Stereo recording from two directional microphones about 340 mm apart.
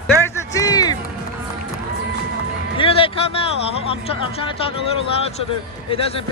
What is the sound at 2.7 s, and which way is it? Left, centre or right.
Music, centre.